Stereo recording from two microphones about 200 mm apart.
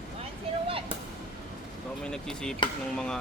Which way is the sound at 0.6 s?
25° right (ahead or behind).